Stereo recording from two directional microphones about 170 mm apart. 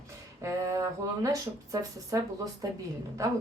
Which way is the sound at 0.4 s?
20° right (ahead or behind).